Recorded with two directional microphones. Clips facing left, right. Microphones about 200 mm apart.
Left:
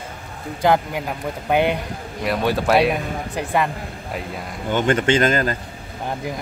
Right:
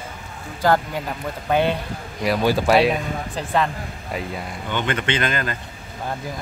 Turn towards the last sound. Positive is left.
turn(degrees=40)  # may be behind; listen again after turning